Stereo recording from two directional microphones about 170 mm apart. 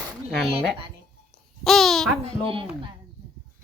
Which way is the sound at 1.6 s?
Centre (ahead or behind).